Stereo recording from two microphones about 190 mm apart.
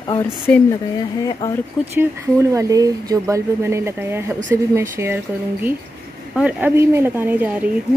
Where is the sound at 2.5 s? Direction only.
20° right (ahead or behind).